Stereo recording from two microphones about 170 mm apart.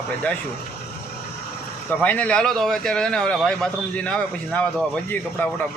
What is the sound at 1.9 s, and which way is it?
Speech, 10° left (ahead or behind).